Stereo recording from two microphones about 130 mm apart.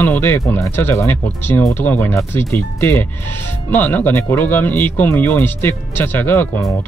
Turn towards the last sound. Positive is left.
turn(degrees=15)  # may be behind; listen again after turning